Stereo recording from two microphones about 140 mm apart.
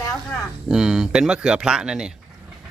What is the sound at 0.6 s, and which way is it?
Speech, 5° right (ahead or behind).